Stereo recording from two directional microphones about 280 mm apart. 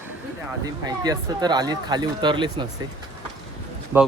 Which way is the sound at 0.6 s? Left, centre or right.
Centre.